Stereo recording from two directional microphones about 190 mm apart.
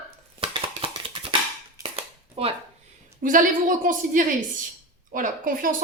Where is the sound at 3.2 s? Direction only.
45° right (ahead or behind).